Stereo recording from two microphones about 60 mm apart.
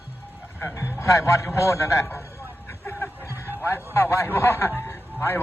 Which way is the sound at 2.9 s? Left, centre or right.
Left.